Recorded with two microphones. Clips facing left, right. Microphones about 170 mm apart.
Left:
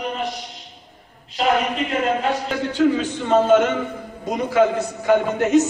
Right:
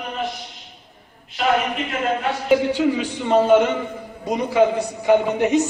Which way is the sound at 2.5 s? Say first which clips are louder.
Right 3 dB; 10° right (ahead or behind).